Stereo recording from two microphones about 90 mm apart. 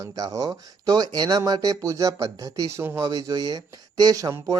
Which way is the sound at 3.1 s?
45° right (ahead or behind).